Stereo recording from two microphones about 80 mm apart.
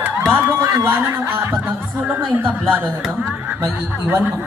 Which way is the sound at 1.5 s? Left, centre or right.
Right.